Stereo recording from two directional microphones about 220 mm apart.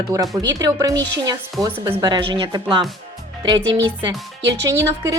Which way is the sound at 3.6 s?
55° right (ahead or behind).